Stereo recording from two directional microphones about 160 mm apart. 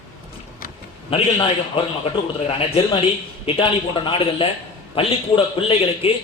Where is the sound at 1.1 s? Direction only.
35° left (ahead or behind).